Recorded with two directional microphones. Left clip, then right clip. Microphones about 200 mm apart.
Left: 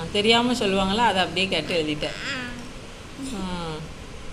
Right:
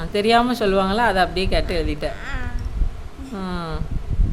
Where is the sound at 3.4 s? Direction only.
50° right (ahead or behind).